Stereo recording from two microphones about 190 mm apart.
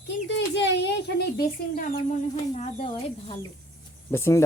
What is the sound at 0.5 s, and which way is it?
Speech, 65° left (ahead or behind).